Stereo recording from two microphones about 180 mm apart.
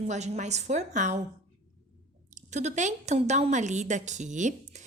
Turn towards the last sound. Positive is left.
turn(degrees=-40)  # may be behind; listen again after turning